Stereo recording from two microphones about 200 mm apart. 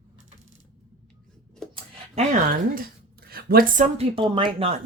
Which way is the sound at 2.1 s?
35° right (ahead or behind).